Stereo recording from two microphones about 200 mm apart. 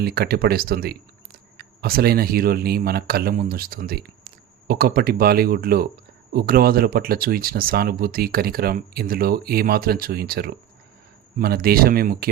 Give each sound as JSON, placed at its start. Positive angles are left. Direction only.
{"t": 0.0, "sound": "speech", "side_deg": -50}